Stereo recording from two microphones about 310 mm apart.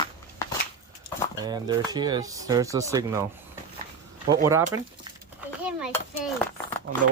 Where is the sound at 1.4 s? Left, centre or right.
Centre.